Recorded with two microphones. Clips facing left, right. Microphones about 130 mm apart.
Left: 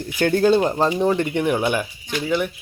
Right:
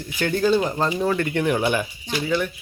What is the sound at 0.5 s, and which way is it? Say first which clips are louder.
Speech: left 3 dB; 25° left (ahead or behind).